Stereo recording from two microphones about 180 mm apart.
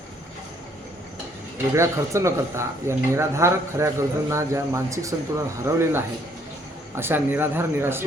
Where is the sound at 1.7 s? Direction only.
15° right (ahead or behind).